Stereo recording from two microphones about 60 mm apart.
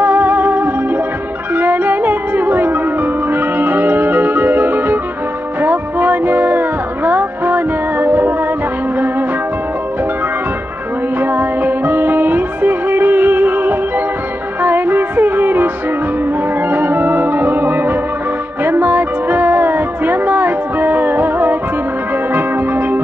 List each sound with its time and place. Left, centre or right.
0.0 s music: right
11.1 s music: right